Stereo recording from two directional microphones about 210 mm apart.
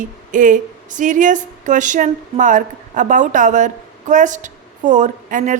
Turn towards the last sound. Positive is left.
turn(degrees=-40)  # may be behind; listen again after turning